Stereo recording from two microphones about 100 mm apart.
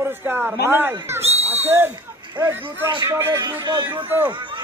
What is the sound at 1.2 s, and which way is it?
Owl, 90° right.